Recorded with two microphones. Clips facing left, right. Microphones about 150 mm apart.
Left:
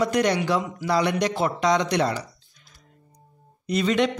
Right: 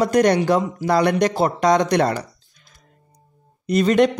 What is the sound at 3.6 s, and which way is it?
Speech, 45° right (ahead or behind).